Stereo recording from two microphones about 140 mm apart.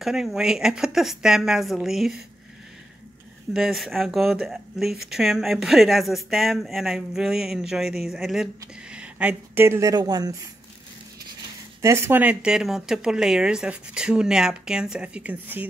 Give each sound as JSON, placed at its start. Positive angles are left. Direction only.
{"t": 0.0, "sound": "speech", "side_deg": -5}
{"t": 3.5, "sound": "speech", "side_deg": 0}
{"t": 11.8, "sound": "speech", "side_deg": -20}